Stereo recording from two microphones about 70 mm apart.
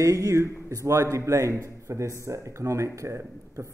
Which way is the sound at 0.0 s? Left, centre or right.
Right.